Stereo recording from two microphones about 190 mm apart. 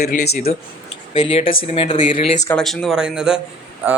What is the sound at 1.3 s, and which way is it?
Speech, 30° left (ahead or behind).